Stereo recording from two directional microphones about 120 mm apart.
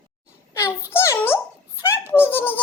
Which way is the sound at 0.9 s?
20° left (ahead or behind).